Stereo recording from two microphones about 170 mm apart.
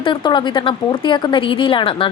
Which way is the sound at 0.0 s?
30° left (ahead or behind).